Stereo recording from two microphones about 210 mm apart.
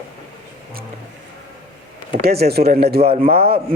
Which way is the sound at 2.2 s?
50° right (ahead or behind).